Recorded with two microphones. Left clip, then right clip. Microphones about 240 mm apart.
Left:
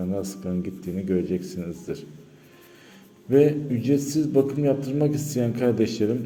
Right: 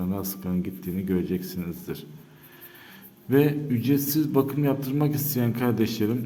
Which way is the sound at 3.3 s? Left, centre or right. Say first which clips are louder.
Left 3 dB; right.